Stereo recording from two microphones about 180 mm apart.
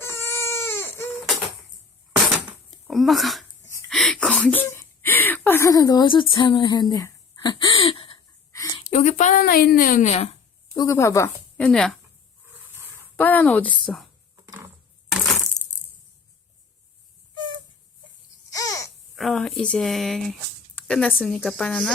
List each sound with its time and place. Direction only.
0.0 s baby cry: 15° left (ahead or behind)
2.3 s a sound: centre (ahead or behind)
3.8 s speech: centre (ahead or behind); by 7.5 s 20° left (ahead or behind)
7.6 s a sound: 30° left (ahead or behind)
8.5 s a sound: 20° left (ahead or behind)
8.9 s a woman's voice: 40° left (ahead or behind)
10.8 s speech: 15° left (ahead or behind)
11.6 s speech: 5° left (ahead or behind)
13.1 s speech: 10° left (ahead or behind)
14.4 s a sound: 15° right (ahead or behind)
18.5 s babbling: 20° left (ahead or behind)
19.1 s speech: 5° left (ahead or behind)